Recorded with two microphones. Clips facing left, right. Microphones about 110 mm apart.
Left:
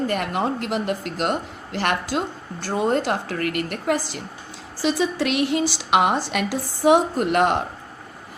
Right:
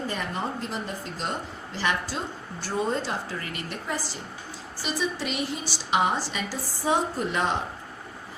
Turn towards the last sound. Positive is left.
turn(degrees=60)  # may be behind; listen again after turning